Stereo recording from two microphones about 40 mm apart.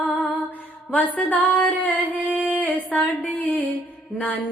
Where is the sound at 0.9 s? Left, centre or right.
Left.